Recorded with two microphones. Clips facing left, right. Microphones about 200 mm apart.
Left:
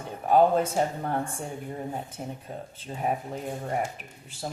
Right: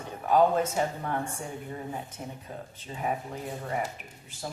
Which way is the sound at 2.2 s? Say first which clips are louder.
Left 3 dB; 45° left (ahead or behind).